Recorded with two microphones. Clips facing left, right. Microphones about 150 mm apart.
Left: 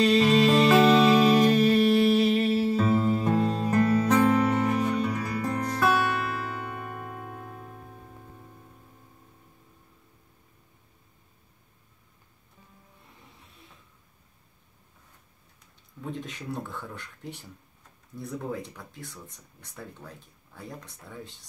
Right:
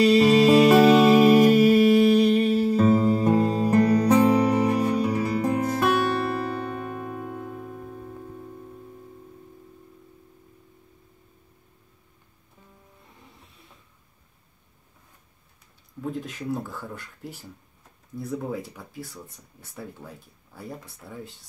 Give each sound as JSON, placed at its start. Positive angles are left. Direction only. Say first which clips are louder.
{"t": 0.0, "sound": "music", "louder": "right 4 dB", "side_deg": -5}
{"t": 5.2, "sound": "music", "louder": "right 6 dB", "side_deg": -20}
{"t": 5.6, "sound": "music", "louder": "right 3 dB", "side_deg": -5}
{"t": 6.8, "sound": "music", "louder": "right 5 dB", "side_deg": -15}
{"t": 16.0, "sound": "speech", "louder": "right 5 dB", "side_deg": 0}